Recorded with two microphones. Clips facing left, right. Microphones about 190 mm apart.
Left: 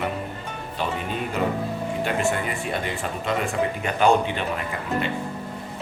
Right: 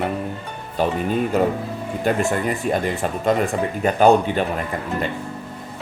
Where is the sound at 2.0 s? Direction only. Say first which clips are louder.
Right 6 dB; 40° right (ahead or behind).